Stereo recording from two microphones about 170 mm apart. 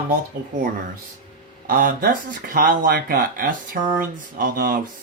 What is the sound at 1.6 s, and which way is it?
Speech, 55° right (ahead or behind).